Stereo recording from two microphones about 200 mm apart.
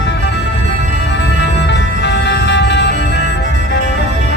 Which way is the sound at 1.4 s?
60° left (ahead or behind).